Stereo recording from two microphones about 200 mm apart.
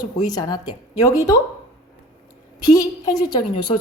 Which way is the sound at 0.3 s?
20° left (ahead or behind).